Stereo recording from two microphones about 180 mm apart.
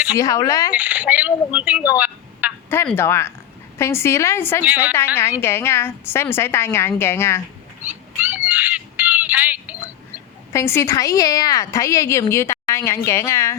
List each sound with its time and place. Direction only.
0.2 s speech: 20° left (ahead or behind)
0.7 s speech: 10° right (ahead or behind)
2.6 s a woman's voice: 10° left (ahead or behind)
4.6 s speech: 10° right (ahead or behind)
5.4 s a woman's voice: 15° left (ahead or behind)
7.9 s a sound: 10° right (ahead or behind)
9.8 s speech: 15° left (ahead or behind)